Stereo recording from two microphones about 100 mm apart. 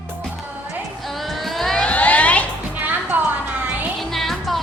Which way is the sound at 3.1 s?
20° right (ahead or behind).